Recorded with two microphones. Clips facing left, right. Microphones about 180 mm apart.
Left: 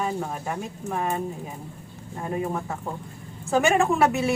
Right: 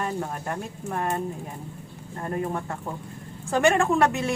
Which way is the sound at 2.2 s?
5° left (ahead or behind).